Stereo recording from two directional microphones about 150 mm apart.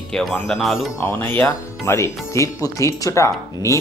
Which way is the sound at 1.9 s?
20° left (ahead or behind).